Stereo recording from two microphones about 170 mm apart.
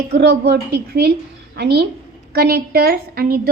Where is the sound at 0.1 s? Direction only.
75° right (ahead or behind).